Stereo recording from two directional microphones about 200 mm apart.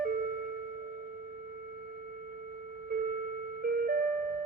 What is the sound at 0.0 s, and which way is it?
Music, 45° right (ahead or behind).